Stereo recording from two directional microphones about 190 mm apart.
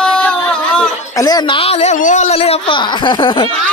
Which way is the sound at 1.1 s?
20° left (ahead or behind).